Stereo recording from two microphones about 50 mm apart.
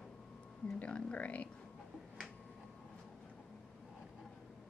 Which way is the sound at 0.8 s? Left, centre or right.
Left.